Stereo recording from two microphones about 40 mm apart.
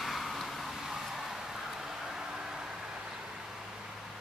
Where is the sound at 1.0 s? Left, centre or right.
Centre.